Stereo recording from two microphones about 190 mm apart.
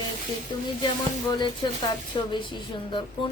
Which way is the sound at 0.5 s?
20° left (ahead or behind).